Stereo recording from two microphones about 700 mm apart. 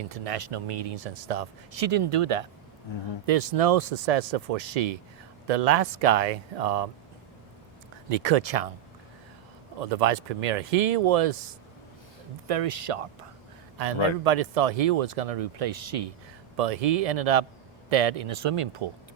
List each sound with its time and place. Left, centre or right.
0.1 s speech: right
1.9 s speech: right
8.1 s speech: right
9.8 s speech: right
12.5 s speech: right
13.7 s speech: right